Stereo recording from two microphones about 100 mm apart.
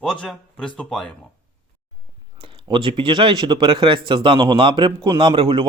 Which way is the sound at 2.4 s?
60° right (ahead or behind).